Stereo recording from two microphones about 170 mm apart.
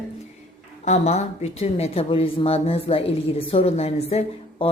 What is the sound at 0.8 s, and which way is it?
A woman's voice, 40° left (ahead or behind).